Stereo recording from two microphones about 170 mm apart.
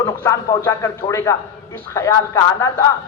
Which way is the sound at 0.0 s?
20° left (ahead or behind).